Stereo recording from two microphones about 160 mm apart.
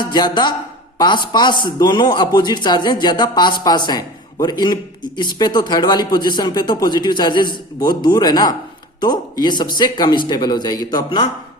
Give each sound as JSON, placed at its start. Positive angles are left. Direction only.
{"t": 0.0, "sound": "a man's voice", "side_deg": 25}